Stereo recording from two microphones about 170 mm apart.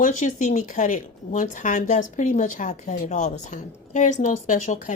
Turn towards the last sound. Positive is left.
turn(degrees=45)  # may be behind; listen again after turning